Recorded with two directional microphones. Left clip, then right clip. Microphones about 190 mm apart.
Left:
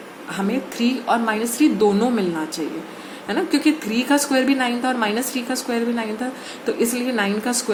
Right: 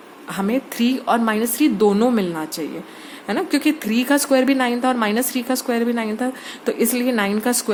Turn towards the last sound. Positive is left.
turn(degrees=-45)  # may be behind; listen again after turning